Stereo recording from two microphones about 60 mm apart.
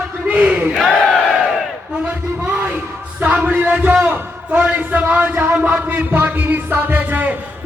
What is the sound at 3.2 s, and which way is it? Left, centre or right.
Music, right.